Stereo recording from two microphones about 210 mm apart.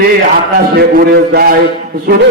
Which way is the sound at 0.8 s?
50° right (ahead or behind).